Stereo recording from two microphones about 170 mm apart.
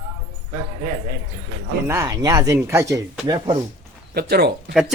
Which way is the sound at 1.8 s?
20° right (ahead or behind).